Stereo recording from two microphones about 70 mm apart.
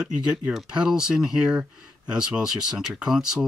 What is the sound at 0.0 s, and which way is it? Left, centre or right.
Speech, centre.